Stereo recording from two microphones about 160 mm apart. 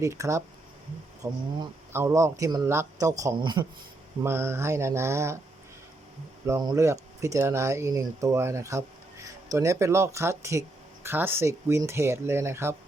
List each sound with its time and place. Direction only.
0.0 s speech: 20° right (ahead or behind)
4.2 s speech: 15° right (ahead or behind)
6.4 s speech: 20° right (ahead or behind)